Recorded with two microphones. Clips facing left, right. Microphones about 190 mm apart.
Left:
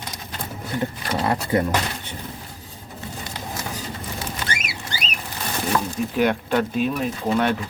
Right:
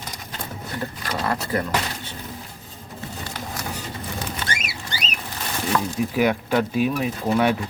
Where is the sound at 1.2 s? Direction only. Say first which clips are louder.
Left 3 dB; 20° left (ahead or behind).